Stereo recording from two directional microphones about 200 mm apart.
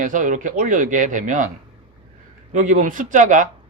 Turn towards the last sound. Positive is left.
turn(degrees=-40)  # may be behind; listen again after turning